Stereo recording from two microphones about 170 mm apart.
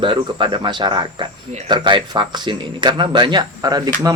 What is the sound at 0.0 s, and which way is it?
Speech, 30° right (ahead or behind).